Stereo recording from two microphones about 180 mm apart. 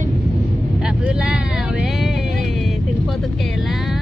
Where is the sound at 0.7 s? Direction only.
5° right (ahead or behind).